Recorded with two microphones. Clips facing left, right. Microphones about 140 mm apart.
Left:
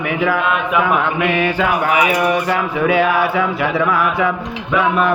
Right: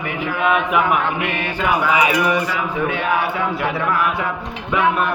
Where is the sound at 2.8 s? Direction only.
90° left.